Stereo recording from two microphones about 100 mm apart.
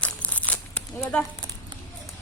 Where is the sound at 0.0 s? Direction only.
15° left (ahead or behind).